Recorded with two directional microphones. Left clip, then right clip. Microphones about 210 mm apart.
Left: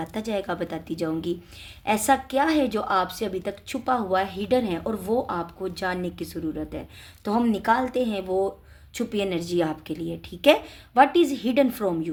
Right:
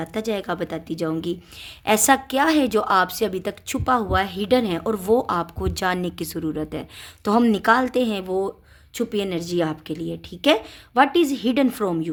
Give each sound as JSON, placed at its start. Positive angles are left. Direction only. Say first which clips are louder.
{"t": 0.0, "sound": "a woman's voice", "louder": "right 3 dB", "side_deg": -25}